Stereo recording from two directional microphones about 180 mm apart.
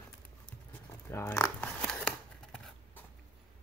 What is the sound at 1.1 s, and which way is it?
Scissors, 15° left (ahead or behind).